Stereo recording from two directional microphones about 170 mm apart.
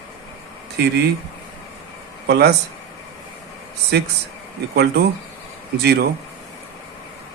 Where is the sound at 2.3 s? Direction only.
75° right (ahead or behind).